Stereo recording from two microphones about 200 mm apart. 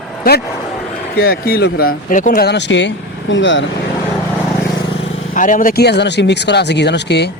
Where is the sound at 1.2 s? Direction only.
50° left (ahead or behind).